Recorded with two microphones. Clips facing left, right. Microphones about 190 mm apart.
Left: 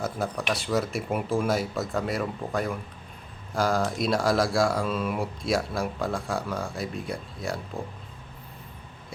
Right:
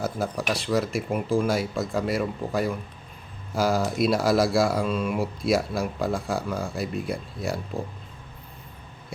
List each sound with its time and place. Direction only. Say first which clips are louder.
0.0 s speech: right 2 dB; 5° right (ahead or behind)